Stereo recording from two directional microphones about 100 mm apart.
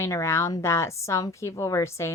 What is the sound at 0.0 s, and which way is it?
A woman's voice, 30° left (ahead or behind).